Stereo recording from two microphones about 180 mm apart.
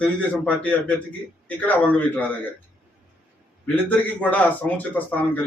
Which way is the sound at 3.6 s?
10° left (ahead or behind).